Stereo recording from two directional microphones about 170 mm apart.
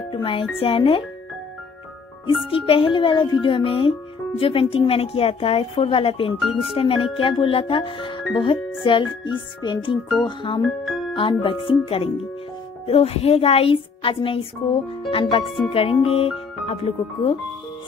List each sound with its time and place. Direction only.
0.1 s speech: 30° left (ahead or behind)
2.5 s speech: 35° left (ahead or behind)
10.9 s music: centre (ahead or behind)
11.1 s speech: 30° left (ahead or behind)
12.8 s speech: 35° left (ahead or behind)